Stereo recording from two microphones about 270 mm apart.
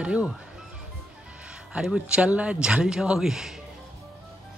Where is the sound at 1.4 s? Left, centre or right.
Centre.